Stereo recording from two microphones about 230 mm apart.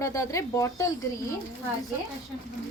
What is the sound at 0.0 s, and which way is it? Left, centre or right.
Speech, centre.